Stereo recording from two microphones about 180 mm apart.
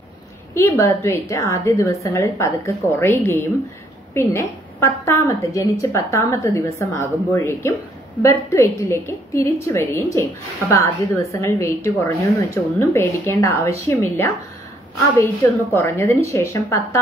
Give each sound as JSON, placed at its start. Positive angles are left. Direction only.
{"t": 0.6, "sound": "a woman's voice", "side_deg": 15}